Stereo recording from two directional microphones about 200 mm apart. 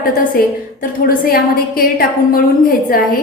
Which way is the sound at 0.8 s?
45° left (ahead or behind).